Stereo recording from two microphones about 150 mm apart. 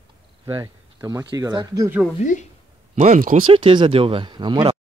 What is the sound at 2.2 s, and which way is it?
Speech, 55° left (ahead or behind).